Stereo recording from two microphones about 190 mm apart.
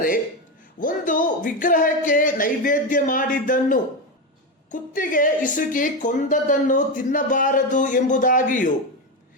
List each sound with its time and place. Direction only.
0.8 s speech: 45° left (ahead or behind)